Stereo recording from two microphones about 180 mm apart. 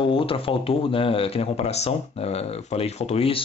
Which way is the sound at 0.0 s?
30° left (ahead or behind).